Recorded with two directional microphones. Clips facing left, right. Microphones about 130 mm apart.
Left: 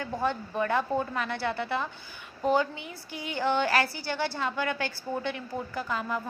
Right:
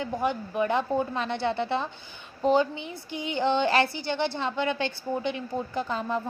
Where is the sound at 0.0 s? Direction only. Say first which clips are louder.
Right 2 dB; 15° right (ahead or behind).